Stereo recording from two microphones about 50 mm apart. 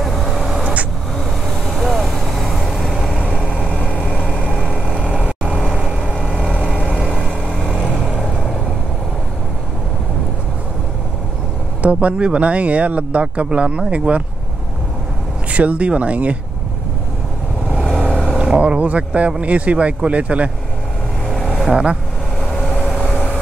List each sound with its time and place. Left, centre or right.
0.0 s vehicle: centre
1.7 s vehicle: centre
3.2 s vehicle: left
5.7 s vehicle: centre
7.2 s vehicle: centre
11.8 s speech: right
15.5 s speech: right
17.7 s vehicle: centre
18.4 s speech: right
21.6 s speech: centre
22.4 s vehicle: centre